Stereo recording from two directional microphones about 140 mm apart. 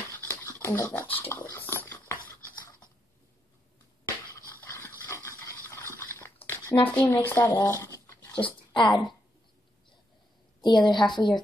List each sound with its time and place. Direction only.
0.2 s dog: 15° left (ahead or behind)
4.6 s dog: 20° left (ahead or behind)
6.7 s speech: 30° left (ahead or behind)
7.8 s a sound: 20° left (ahead or behind)
8.4 s speech: 35° left (ahead or behind)
10.6 s a woman's voice: 30° left (ahead or behind)